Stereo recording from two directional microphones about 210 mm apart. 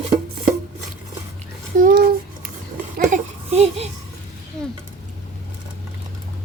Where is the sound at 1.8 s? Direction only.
45° right (ahead or behind).